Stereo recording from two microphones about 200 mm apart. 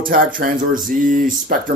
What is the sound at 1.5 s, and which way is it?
Speech, 45° right (ahead or behind).